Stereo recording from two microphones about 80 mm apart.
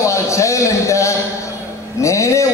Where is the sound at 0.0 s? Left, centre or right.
Left.